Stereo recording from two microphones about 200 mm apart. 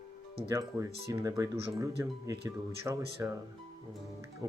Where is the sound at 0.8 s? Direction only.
15° right (ahead or behind).